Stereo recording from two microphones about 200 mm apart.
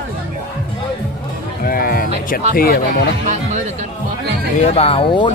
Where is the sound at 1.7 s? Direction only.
45° left (ahead or behind).